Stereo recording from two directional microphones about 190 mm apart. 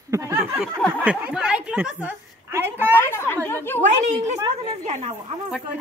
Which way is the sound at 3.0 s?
10° left (ahead or behind).